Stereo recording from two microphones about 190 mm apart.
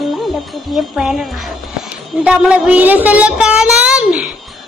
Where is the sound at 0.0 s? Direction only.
Centre (ahead or behind).